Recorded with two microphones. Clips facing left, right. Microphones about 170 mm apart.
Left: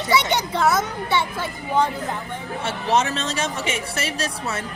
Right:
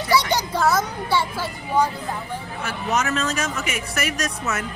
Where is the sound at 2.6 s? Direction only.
30° left (ahead or behind).